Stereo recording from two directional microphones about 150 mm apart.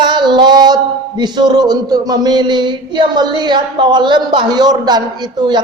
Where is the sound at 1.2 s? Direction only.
30° right (ahead or behind).